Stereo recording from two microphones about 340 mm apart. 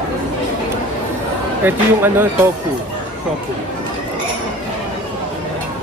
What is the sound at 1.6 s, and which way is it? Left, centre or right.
Speech, centre.